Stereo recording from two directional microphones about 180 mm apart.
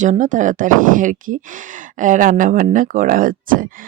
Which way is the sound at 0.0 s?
45° right (ahead or behind).